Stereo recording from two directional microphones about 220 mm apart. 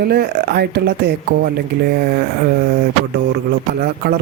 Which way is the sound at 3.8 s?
45° right (ahead or behind).